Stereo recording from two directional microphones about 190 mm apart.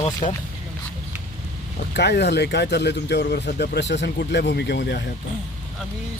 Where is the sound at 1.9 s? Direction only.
60° left (ahead or behind).